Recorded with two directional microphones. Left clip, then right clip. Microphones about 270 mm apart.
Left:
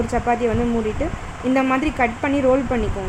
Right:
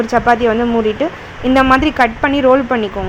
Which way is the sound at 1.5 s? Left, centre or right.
Centre.